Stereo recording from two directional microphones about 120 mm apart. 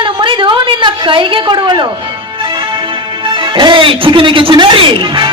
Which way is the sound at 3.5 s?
40° right (ahead or behind).